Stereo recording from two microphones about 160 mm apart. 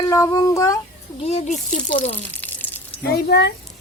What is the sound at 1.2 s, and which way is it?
Speech, 40° left (ahead or behind).